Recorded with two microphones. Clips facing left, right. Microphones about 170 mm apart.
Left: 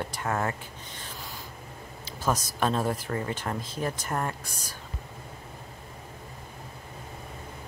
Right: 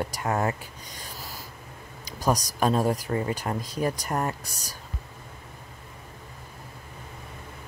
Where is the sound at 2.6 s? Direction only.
10° right (ahead or behind).